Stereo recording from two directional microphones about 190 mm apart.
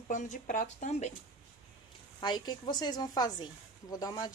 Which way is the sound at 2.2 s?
20° left (ahead or behind).